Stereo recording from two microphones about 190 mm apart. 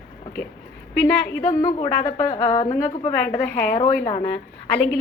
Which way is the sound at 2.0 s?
15° left (ahead or behind).